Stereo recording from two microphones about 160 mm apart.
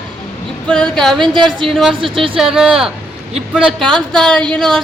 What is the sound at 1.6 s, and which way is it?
A woman's voice, centre (ahead or behind).